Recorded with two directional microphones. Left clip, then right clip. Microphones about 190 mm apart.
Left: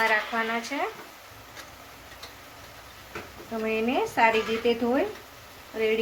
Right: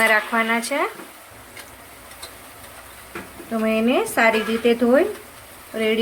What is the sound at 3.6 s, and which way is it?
Speech, 55° right (ahead or behind).